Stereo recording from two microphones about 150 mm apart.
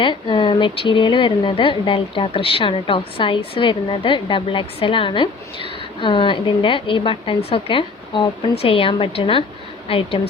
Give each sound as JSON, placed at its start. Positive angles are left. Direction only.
{"t": 0.0, "sound": "a woman's voice", "side_deg": 30}